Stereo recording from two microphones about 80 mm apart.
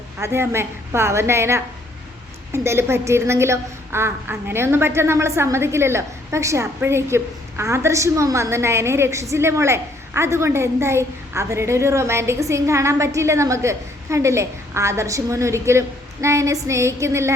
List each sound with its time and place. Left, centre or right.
0.2 s a woman's voice: right